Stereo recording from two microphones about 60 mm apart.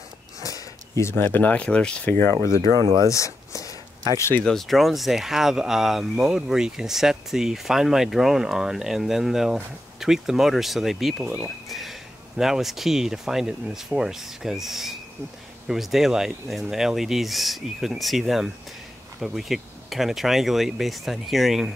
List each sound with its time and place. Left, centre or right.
0.4 s a sound: left
1.1 s speech: left
1.5 s speech: centre
2.0 s speech: left
3.1 s speech: left
4.5 s speech: centre